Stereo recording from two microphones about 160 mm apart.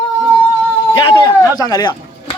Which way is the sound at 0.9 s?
30° left (ahead or behind).